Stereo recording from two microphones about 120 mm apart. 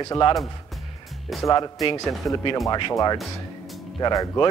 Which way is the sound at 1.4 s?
30° left (ahead or behind).